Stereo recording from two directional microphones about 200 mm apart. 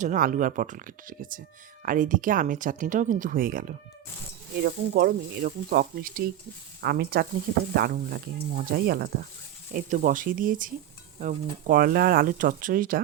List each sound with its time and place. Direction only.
0.0 s speech: 40° right (ahead or behind)